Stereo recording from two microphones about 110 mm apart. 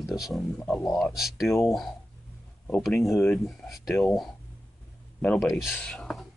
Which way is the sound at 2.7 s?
Centre (ahead or behind).